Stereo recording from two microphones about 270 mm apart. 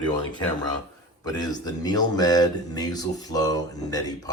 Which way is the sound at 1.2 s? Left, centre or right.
Centre.